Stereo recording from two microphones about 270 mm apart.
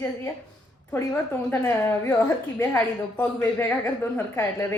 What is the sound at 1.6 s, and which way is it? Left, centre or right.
A woman's voice, centre.